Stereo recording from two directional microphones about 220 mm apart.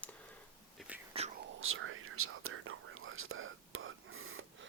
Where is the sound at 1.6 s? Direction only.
65° right (ahead or behind).